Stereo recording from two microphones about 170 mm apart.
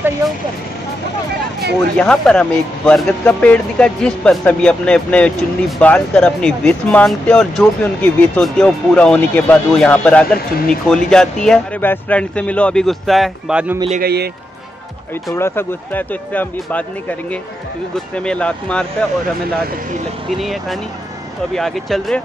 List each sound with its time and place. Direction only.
0.2 s speech: 20° right (ahead or behind)
2.0 s speech: 5° left (ahead or behind)
14.0 s speech: 70° right (ahead or behind)
15.3 s speech: 15° left (ahead or behind)
18.1 s speech: 5° left (ahead or behind)
20.2 s speech: centre (ahead or behind)